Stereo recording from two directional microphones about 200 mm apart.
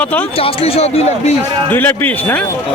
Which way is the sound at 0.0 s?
5° left (ahead or behind).